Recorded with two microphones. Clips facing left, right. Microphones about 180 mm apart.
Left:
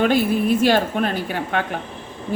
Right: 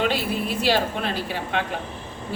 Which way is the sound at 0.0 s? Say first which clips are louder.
Left 6 dB; 50° left (ahead or behind).